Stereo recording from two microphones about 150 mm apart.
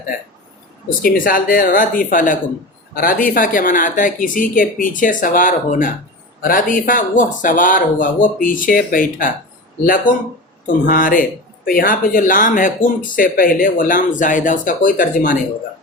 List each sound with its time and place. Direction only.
1.0 s speech: 70° left (ahead or behind)